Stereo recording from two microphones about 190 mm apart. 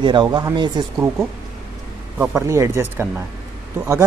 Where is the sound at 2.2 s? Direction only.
10° right (ahead or behind).